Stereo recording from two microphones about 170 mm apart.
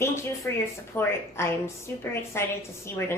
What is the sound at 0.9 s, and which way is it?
A woman's voice, 15° left (ahead or behind).